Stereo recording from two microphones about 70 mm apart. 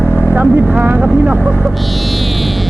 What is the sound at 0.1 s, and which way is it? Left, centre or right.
Vehicle, left.